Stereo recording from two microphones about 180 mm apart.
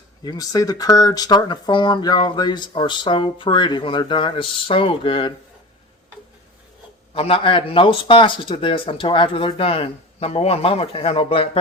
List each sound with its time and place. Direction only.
0.3 s speech: 20° left (ahead or behind)
7.1 s speech: 30° left (ahead or behind)